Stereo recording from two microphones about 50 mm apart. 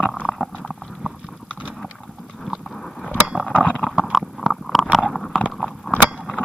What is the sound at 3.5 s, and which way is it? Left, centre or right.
Vehicle, left.